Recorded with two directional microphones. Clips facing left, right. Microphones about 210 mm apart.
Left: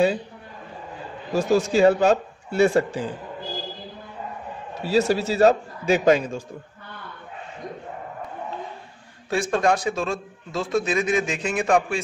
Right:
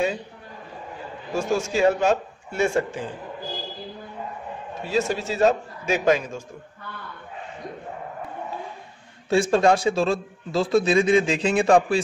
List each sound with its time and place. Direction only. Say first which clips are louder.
1.3 s a man's voice: left 4 dB; 35° left (ahead or behind)
4.8 s a man's voice: left 4 dB; 35° left (ahead or behind)
9.3 s a man's voice: right 3 dB; 30° right (ahead or behind)